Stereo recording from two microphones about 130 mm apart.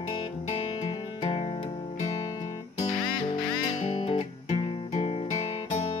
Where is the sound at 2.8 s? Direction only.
35° left (ahead or behind).